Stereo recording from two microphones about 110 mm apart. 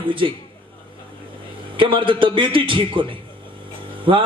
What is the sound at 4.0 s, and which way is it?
Vehicle, 50° right (ahead or behind).